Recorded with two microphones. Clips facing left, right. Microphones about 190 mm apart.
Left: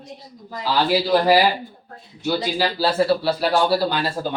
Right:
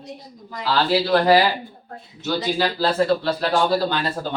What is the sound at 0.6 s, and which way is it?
Speech, 15° left (ahead or behind).